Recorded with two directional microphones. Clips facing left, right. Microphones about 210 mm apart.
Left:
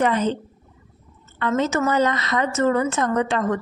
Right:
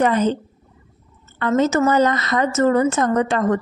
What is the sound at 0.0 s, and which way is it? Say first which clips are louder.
Speech: right 3 dB; 40° right (ahead or behind).